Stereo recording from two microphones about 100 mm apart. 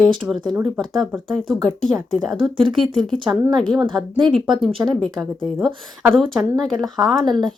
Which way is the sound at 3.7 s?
50° right (ahead or behind).